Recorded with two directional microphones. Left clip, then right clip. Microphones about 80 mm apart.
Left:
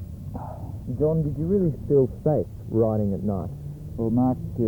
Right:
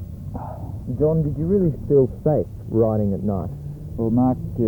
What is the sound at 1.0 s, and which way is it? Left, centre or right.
Speech, centre.